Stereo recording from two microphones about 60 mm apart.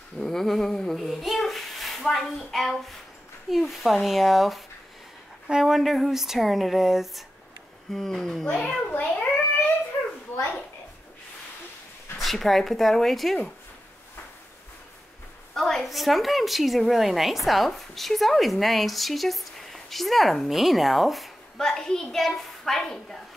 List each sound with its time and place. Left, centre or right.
0.2 s a child's voice: centre
9.0 s a sound: centre
12.2 s a woman's voice: centre
15.5 s a woman's voice: centre